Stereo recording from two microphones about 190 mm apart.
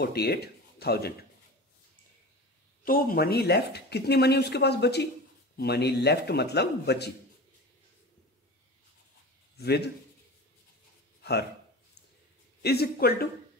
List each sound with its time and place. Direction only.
0.0 s speech: 55° left (ahead or behind)
2.8 s speech: 50° left (ahead or behind)
9.6 s a man's voice: 60° left (ahead or behind)
11.1 s a sound: 60° left (ahead or behind)
12.6 s speech: 55° left (ahead or behind)